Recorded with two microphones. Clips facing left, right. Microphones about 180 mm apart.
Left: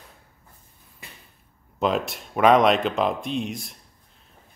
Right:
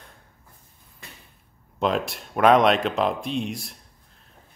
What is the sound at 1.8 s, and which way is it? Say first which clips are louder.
Speech: even; centre (ahead or behind).